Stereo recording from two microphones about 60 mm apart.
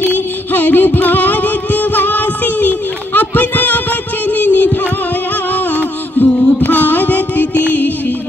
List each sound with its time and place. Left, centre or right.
0.0 s music: left